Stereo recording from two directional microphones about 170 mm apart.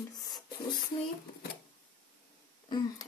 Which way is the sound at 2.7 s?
25° left (ahead or behind).